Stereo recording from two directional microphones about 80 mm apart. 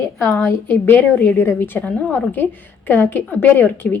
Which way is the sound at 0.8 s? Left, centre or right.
Left.